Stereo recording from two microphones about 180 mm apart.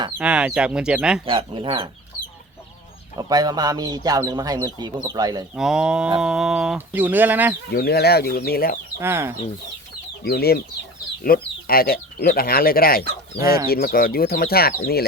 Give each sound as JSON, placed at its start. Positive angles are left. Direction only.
{"t": 0.2, "sound": "speech", "side_deg": -5}
{"t": 1.2, "sound": "speech", "side_deg": -30}
{"t": 3.2, "sound": "speech", "side_deg": -20}
{"t": 5.5, "sound": "speech", "side_deg": -5}
{"t": 6.1, "sound": "bird", "side_deg": -5}
{"t": 7.7, "sound": "speech", "side_deg": 60}
{"t": 9.0, "sound": "bird", "side_deg": -15}
{"t": 10.2, "sound": "speech", "side_deg": 60}